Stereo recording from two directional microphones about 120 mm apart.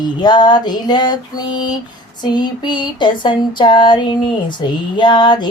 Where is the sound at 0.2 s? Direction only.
35° left (ahead or behind).